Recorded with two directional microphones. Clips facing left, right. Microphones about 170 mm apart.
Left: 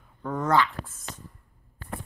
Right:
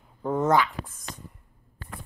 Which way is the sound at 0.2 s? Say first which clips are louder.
Right 3 dB; 25° right (ahead or behind).